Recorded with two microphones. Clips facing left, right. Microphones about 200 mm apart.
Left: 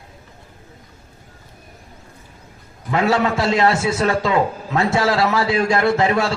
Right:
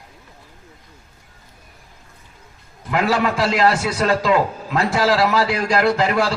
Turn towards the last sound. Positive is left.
turn(degrees=25)  # may be behind; listen again after turning